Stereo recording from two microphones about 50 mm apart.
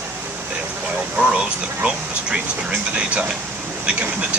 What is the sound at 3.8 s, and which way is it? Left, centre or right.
Speech, right.